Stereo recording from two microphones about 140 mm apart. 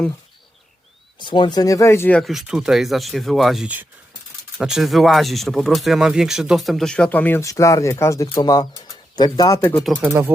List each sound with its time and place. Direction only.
1.2 s speech: 35° left (ahead or behind); by 2.2 s 15° left (ahead or behind)
2.2 s speech: 5° right (ahead or behind); by 9.6 s 25° left (ahead or behind)
9.8 s speech: 10° right (ahead or behind)